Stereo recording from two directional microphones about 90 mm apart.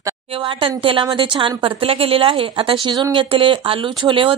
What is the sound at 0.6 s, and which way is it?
A woman's voice, 70° right (ahead or behind).